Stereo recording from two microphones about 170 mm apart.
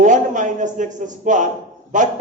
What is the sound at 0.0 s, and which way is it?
A man's voice, 45° right (ahead or behind).